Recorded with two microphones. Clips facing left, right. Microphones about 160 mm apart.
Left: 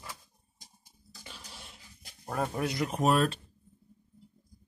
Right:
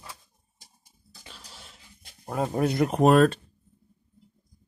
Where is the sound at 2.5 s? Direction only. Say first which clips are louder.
Right 7 dB; 50° right (ahead or behind).